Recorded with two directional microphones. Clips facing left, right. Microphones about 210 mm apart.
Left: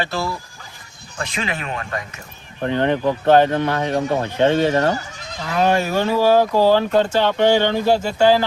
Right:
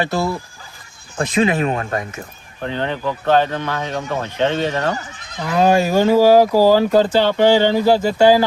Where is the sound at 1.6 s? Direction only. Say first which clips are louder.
Right 7 dB; 35° right (ahead or behind).